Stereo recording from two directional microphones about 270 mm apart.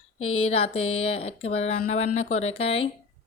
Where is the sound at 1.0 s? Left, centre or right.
Left.